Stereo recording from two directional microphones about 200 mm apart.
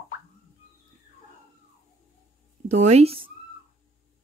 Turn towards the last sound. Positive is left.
turn(degrees=-30)  # may be behind; listen again after turning